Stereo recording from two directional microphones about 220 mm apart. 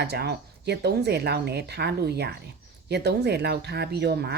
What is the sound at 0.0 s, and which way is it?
Speech, 50° right (ahead or behind).